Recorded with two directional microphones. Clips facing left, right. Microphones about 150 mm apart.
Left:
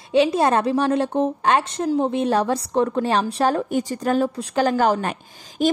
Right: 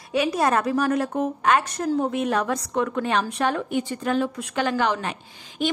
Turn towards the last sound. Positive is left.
turn(degrees=45)  # may be behind; listen again after turning